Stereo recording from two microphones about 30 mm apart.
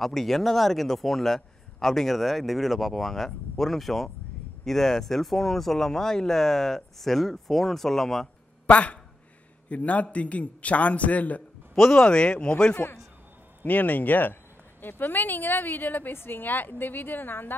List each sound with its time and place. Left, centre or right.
0.0 s a man's voice: centre
8.6 s a man's voice: left
11.9 s speech: left
13.7 s a woman's voice: left